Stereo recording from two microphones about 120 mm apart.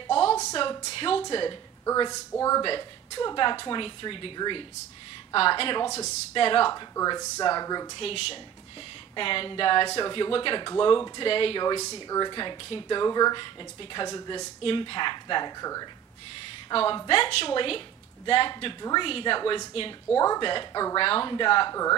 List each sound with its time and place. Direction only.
0.0 s a sound: 45° left (ahead or behind)
0.6 s speech: 50° left (ahead or behind)
1.9 s speech: 30° left (ahead or behind)
2.6 s speech: 45° left (ahead or behind)
6.7 s speech: 30° left (ahead or behind)
7.9 s speech: 55° left (ahead or behind)
11.9 s speech: 35° left (ahead or behind)
14.6 s speech: 45° left (ahead or behind); by 15.9 s 30° left (ahead or behind)
16.7 s speech: 45° left (ahead or behind)
21.0 s speech: 50° left (ahead or behind)